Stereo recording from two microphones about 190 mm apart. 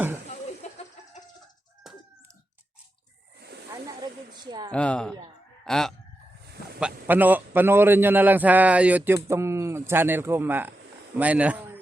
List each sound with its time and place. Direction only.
1.8 s chicken: centre (ahead or behind)
3.7 s snake: 20° right (ahead or behind)
4.7 s a man's voice: 5° left (ahead or behind)